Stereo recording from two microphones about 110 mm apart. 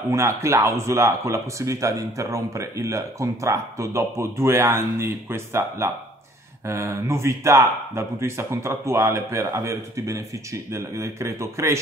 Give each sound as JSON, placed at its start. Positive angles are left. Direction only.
{"t": 0.1, "sound": "speech", "side_deg": -25}